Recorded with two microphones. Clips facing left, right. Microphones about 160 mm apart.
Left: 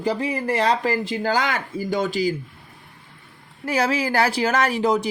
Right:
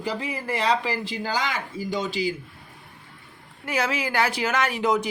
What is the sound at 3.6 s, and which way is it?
Speech, 35° left (ahead or behind).